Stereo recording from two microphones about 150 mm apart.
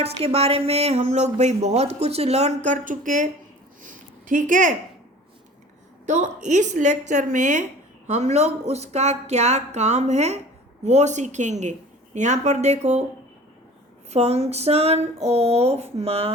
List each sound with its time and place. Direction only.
0.0 s speech: 40° right (ahead or behind); by 3.2 s 60° right (ahead or behind)
3.8 s a sound: 60° right (ahead or behind)
6.1 s speech: 55° right (ahead or behind)
14.1 s speech: 45° right (ahead or behind)